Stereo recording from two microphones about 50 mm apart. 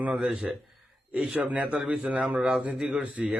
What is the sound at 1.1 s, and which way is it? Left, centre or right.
A man's voice, right.